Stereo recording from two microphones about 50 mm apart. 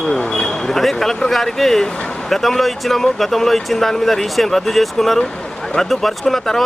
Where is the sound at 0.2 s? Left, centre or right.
Centre.